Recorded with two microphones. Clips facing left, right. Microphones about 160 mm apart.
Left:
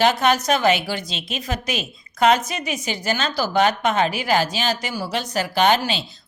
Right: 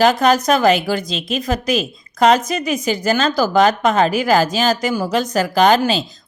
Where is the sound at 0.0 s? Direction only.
40° right (ahead or behind).